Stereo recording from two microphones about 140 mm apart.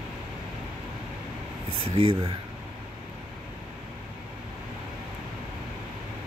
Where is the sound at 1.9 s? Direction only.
45° right (ahead or behind).